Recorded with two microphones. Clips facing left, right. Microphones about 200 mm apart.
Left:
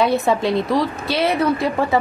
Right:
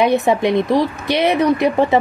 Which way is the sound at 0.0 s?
20° right (ahead or behind).